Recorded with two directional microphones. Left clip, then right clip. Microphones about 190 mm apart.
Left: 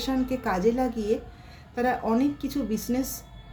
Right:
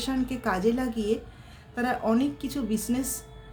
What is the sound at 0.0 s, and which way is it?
A woman's voice, 25° right (ahead or behind).